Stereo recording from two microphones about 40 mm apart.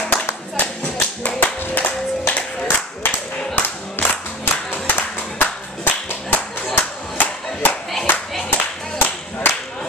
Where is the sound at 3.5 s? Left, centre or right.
Left.